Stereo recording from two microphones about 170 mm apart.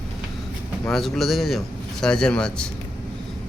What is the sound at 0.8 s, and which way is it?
Speech, centre (ahead or behind).